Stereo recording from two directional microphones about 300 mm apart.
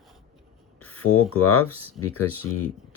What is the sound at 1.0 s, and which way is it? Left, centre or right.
Speech, left.